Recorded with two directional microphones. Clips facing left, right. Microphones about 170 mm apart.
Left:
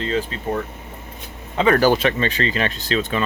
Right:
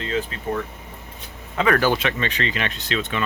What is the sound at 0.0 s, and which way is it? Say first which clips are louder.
Speech: left 3 dB; 35° left (ahead or behind).